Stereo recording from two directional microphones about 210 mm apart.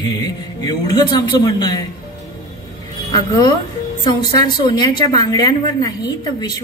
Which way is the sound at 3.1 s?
20° left (ahead or behind).